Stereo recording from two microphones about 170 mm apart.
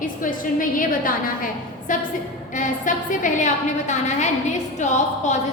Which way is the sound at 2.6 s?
50° left (ahead or behind).